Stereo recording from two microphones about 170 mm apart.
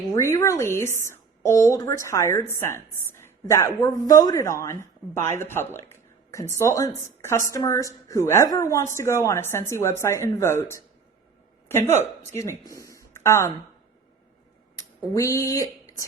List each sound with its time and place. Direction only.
0.1 s a woman's voice: 15° left (ahead or behind)
15.1 s a woman's voice: 20° left (ahead or behind)